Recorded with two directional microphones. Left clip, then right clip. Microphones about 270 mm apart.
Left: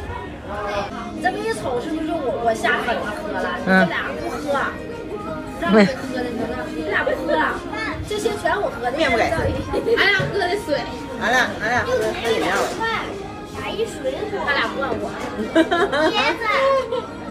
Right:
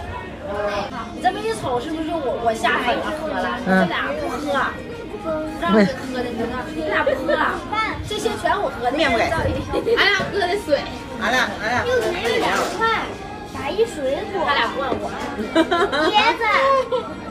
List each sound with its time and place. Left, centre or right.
1.2 s a sound: centre
2.5 s speech: centre
5.6 s speech: centre
13.8 s speech: right
15.5 s speech: centre